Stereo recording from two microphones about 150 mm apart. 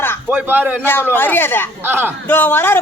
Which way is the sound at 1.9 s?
15° right (ahead or behind).